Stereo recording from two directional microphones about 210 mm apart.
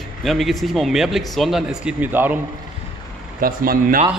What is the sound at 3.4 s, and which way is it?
Speech, 45° right (ahead or behind).